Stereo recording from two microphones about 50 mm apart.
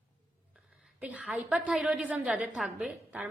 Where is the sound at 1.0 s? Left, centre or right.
Right.